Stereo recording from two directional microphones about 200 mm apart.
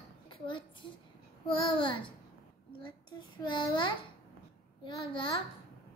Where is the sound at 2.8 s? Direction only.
25° left (ahead or behind).